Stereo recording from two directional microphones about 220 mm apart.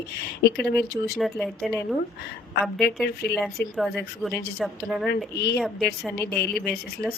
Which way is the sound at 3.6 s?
50° left (ahead or behind).